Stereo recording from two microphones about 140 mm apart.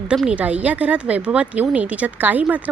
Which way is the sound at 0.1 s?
5° right (ahead or behind).